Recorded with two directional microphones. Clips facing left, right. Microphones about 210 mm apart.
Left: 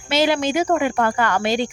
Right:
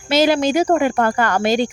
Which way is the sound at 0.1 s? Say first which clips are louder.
Right 3 dB; 40° right (ahead or behind).